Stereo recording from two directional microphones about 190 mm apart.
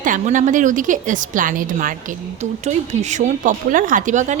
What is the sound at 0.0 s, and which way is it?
A woman's voice, 45° right (ahead or behind).